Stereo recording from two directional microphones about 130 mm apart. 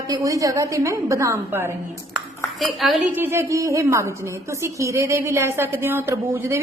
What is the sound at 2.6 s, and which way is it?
Speech, centre (ahead or behind).